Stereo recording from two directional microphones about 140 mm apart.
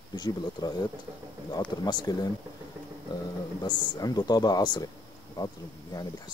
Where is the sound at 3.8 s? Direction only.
25° left (ahead or behind).